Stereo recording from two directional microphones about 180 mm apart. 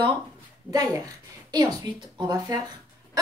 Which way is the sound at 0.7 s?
20° right (ahead or behind).